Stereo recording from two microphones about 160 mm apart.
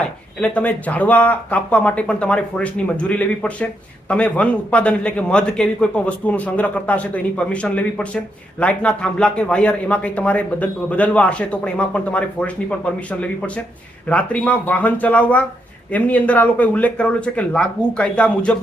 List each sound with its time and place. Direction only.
0.0 s a man's voice: 10° left (ahead or behind)